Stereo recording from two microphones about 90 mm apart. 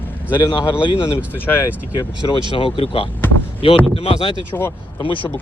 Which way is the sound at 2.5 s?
85° left.